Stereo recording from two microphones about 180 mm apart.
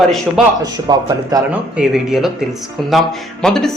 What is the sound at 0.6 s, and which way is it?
Speech, 20° right (ahead or behind).